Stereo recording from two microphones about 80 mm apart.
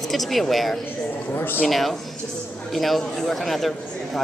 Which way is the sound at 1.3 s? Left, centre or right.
Left.